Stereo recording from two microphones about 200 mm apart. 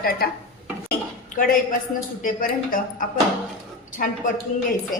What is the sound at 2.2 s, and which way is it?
Speech, 45° left (ahead or behind).